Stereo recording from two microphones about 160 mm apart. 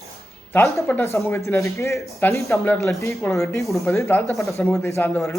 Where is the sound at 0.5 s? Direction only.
15° left (ahead or behind).